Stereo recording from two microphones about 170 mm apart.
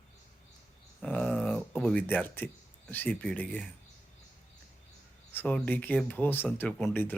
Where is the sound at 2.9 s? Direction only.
10° left (ahead or behind).